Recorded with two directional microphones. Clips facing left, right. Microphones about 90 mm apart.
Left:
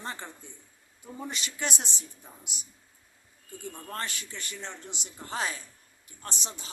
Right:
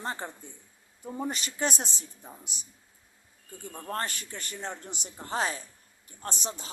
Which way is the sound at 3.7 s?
35° right (ahead or behind).